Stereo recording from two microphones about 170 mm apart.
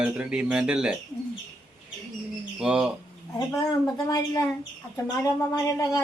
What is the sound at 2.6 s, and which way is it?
Speech, 5° right (ahead or behind).